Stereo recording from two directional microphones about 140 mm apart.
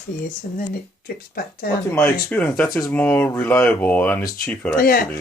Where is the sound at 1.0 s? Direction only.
90° left.